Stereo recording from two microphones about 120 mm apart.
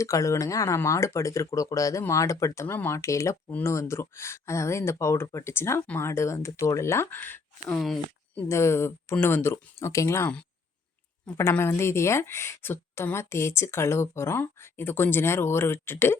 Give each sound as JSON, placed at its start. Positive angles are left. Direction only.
{"t": 0.0, "sound": "a woman's voice", "side_deg": 25}
{"t": 11.3, "sound": "a woman's voice", "side_deg": 20}